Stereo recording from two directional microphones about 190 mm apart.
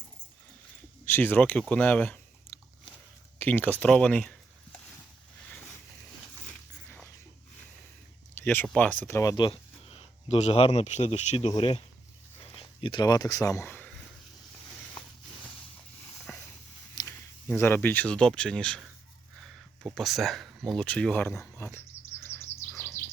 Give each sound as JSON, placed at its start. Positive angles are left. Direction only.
{"t": 1.0, "sound": "chewing", "side_deg": 10}
{"t": 3.3, "sound": "speech", "side_deg": 10}
{"t": 8.4, "sound": "speech", "side_deg": 10}
{"t": 16.3, "sound": "dog", "side_deg": 10}
{"t": 16.9, "sound": "speech", "side_deg": 15}
{"t": 22.2, "sound": "bird vocalization", "side_deg": 15}